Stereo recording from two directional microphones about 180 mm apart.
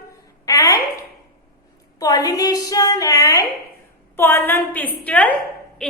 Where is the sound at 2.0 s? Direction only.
20° left (ahead or behind).